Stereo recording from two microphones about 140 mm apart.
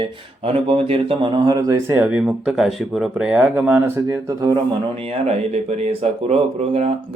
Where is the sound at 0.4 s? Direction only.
45° right (ahead or behind).